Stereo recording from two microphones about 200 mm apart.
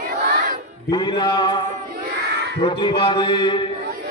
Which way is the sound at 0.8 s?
20° left (ahead or behind).